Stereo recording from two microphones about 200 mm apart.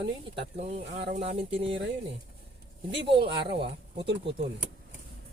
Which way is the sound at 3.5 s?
60° right (ahead or behind).